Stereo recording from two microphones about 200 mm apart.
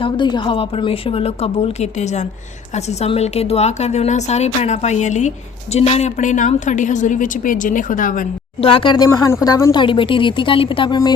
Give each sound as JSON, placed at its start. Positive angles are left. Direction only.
{"t": 0.0, "sound": "a woman's voice", "side_deg": 25}
{"t": 8.6, "sound": "a woman's voice", "side_deg": 25}